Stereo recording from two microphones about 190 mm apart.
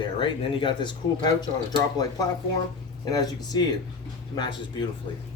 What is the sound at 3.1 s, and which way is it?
Speech, 20° left (ahead or behind).